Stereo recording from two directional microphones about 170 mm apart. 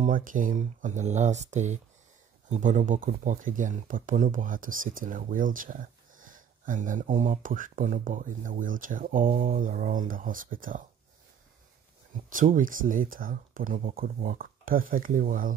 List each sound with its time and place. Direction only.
0.0 s speech: 50° right (ahead or behind)
12.3 s speech: 50° right (ahead or behind)